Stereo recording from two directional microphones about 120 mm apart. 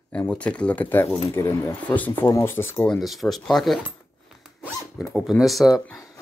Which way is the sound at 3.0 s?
Centre (ahead or behind).